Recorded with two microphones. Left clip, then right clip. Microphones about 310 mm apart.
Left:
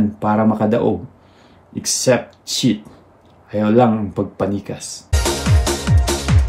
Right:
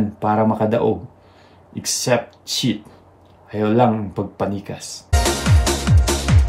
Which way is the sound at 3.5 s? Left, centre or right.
Centre.